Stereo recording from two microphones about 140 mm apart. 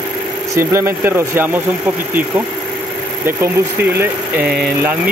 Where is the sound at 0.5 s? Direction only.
20° right (ahead or behind).